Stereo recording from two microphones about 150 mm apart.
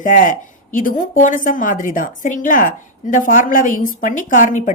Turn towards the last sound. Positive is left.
turn(degrees=55)  # may be behind; listen again after turning